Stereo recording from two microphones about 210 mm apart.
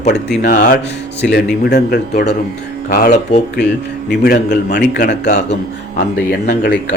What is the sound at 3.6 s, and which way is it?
A man's voice, 55° left (ahead or behind).